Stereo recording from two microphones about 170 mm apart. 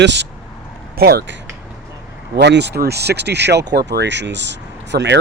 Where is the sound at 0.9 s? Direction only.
70° right (ahead or behind).